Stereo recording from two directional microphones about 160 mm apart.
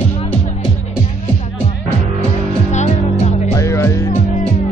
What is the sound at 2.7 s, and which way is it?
Music, 45° left (ahead or behind).